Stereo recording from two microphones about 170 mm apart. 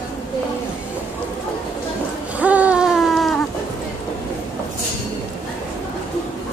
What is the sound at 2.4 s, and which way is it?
Baby cry, 10° right (ahead or behind).